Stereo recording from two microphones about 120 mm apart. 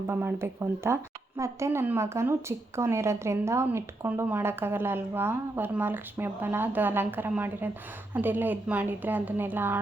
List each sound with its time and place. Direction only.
0.1 s speech: 15° right (ahead or behind)